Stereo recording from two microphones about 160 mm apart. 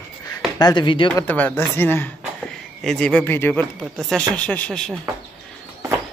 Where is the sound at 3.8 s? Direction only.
Centre (ahead or behind).